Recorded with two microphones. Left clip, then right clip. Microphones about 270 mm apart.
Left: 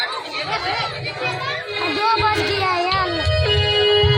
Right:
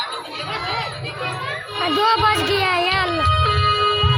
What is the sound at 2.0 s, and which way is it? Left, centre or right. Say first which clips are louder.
Music: right 1 dB; right.